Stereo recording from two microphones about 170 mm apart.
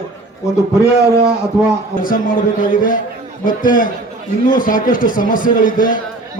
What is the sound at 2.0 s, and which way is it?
A man's voice, 55° left (ahead or behind).